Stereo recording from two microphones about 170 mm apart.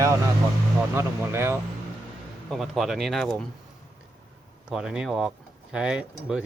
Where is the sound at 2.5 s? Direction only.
Centre (ahead or behind).